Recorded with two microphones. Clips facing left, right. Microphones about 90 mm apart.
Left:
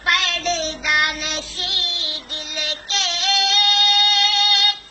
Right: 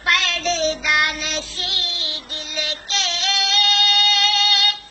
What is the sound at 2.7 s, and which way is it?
Child singing, 55° left (ahead or behind).